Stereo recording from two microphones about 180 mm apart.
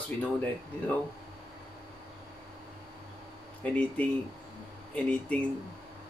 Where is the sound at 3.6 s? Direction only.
10° left (ahead or behind).